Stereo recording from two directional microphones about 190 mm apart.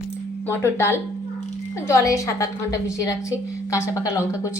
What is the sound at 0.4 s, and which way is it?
A woman's voice, 10° left (ahead or behind).